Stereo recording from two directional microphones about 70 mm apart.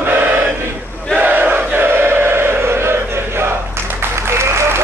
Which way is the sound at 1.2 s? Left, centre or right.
Right.